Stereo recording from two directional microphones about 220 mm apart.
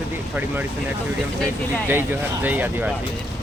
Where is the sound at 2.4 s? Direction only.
10° right (ahead or behind).